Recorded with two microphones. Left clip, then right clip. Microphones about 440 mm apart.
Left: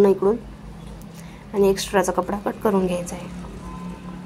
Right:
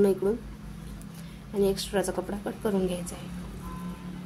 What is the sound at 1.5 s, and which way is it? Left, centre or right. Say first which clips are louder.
A woman's voice: left 8 dB; right.